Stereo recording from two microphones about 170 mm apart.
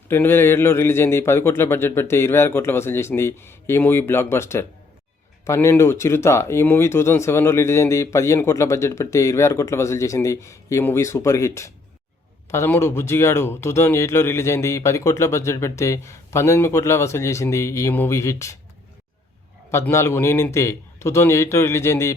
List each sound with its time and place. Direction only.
0.1 s speech: 15° left (ahead or behind)
19.7 s speech: 15° left (ahead or behind)